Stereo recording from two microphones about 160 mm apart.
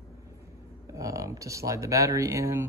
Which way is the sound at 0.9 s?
20° right (ahead or behind).